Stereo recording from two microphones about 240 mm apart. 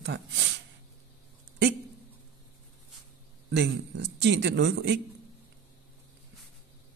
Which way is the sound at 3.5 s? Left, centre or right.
Right.